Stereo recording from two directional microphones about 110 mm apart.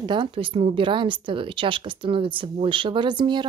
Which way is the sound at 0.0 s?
45° right (ahead or behind).